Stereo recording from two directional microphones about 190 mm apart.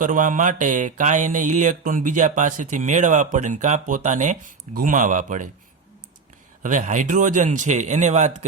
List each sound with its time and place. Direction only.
0.0 s mantra: 45° right (ahead or behind)
6.6 s mantra: 40° right (ahead or behind)